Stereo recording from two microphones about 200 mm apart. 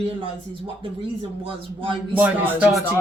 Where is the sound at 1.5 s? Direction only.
25° right (ahead or behind).